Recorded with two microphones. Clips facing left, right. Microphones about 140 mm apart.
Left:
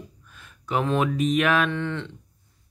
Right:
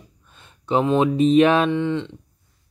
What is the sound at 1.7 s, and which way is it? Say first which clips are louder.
Speech: right 7 dB; 15° right (ahead or behind).